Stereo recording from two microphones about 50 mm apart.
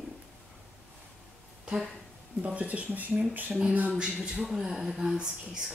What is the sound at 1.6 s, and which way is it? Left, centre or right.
Speech, centre.